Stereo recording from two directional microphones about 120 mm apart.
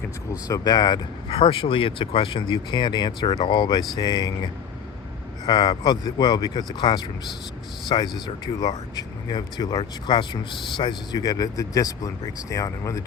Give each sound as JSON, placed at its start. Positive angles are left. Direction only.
{"t": 0.4, "sound": "speech", "side_deg": 30}
{"t": 5.5, "sound": "speech", "side_deg": 35}